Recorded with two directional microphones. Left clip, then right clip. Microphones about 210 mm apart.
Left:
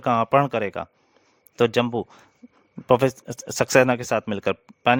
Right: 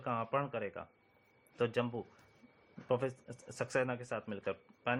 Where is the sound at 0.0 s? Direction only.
55° left (ahead or behind).